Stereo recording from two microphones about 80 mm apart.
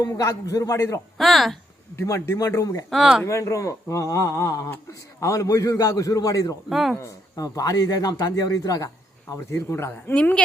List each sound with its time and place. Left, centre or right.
0.0 s a man's voice: left
1.2 s speech: centre
2.0 s speech: left
2.9 s speech: centre
3.2 s a man's voice: left
6.7 s speech: centre
7.0 s a man's voice: left
9.3 s speech: left
10.2 s speech: centre